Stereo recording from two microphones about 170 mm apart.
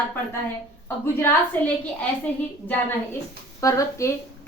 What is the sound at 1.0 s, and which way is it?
Speech, 10° left (ahead or behind).